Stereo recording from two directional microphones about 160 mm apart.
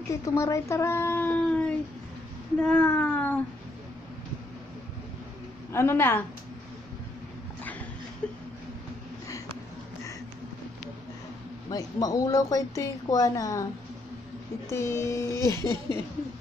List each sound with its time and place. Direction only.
0.1 s speech: 20° left (ahead or behind)
5.7 s speech: 15° left (ahead or behind)
8.2 s speech: 5° left (ahead or behind)
11.7 s speech: 20° left (ahead or behind)
14.7 s speech: 15° left (ahead or behind)